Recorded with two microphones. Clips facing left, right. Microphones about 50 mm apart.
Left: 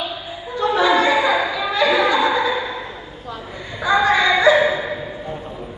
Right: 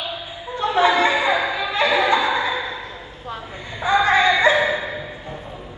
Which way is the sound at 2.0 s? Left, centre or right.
Right.